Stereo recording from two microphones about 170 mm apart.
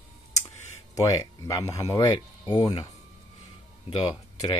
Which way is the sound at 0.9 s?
20° left (ahead or behind).